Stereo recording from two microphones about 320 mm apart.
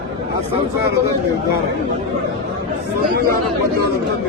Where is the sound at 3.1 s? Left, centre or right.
Right.